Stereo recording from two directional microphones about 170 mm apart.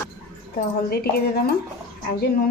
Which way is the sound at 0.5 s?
65° left (ahead or behind).